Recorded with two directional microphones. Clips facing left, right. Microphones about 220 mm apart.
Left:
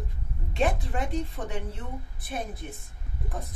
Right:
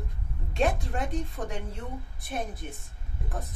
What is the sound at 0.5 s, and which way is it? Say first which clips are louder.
Speech: even; centre (ahead or behind).